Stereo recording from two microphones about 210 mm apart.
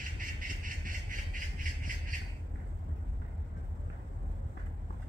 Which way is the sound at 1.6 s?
40° right (ahead or behind).